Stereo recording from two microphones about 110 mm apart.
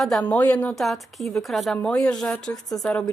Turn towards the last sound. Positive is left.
turn(degrees=10)  # may be behind; listen again after turning